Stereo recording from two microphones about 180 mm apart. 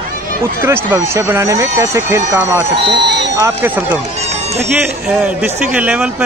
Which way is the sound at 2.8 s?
25° right (ahead or behind).